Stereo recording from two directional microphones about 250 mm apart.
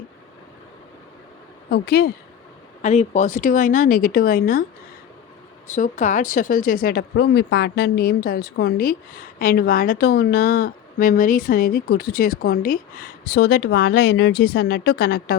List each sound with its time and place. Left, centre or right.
1.7 s speech: left
2.8 s speech: left
5.6 s speech: left